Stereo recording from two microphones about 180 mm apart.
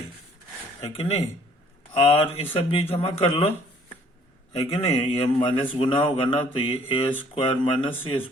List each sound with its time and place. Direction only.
0.8 s speech: 35° left (ahead or behind)
4.5 s a man's voice: 35° left (ahead or behind)